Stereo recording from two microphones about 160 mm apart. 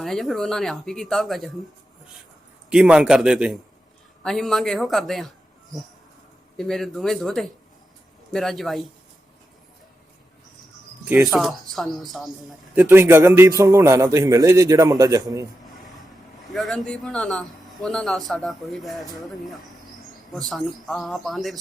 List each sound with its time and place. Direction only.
0.0 s a man's voice: centre (ahead or behind)
2.6 s a man's voice: 5° right (ahead or behind)
6.6 s a man's voice: centre (ahead or behind)
11.1 s a man's voice: centre (ahead or behind)
12.7 s a man's voice: 10° right (ahead or behind)
16.5 s a man's voice: centre (ahead or behind)